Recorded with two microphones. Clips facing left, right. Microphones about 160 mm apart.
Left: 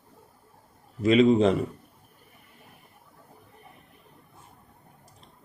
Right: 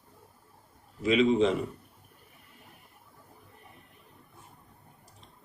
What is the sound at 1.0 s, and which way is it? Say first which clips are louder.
Speech: left 4 dB; 45° left (ahead or behind).